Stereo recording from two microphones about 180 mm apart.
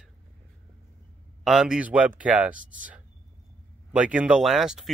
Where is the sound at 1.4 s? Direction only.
Centre (ahead or behind).